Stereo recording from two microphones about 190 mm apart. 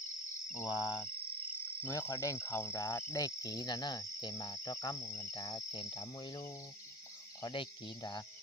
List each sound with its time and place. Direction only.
0.7 s cricket: 5° right (ahead or behind)
1.8 s cricket: 15° left (ahead or behind)